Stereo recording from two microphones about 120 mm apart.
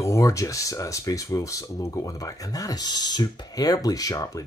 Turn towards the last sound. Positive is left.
turn(degrees=30)  # may be behind; listen again after turning